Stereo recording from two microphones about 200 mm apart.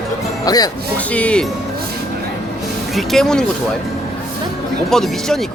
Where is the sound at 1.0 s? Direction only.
5° left (ahead or behind).